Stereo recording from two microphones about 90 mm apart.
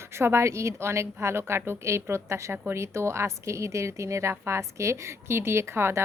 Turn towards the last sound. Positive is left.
turn(degrees=-30)  # may be behind; listen again after turning